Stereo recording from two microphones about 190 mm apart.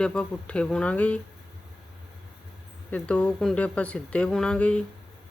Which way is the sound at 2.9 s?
5° left (ahead or behind).